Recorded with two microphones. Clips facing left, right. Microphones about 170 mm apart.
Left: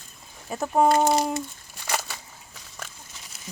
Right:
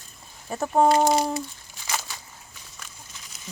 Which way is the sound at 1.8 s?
60° left (ahead or behind).